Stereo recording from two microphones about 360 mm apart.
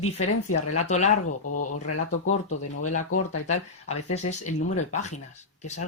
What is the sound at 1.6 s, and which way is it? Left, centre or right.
Speech, left.